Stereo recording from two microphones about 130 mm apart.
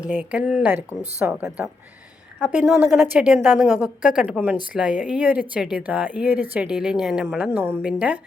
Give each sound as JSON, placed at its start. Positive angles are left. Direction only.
{"t": 0.0, "sound": "a woman's voice", "side_deg": -10}